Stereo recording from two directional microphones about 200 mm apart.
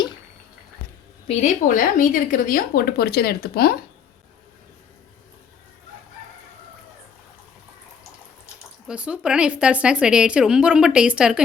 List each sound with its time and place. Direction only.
1.3 s speech: 40° left (ahead or behind)
8.9 s speech: 5° right (ahead or behind)